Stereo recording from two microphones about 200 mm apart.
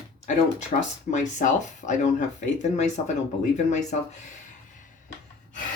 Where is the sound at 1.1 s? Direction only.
35° left (ahead or behind).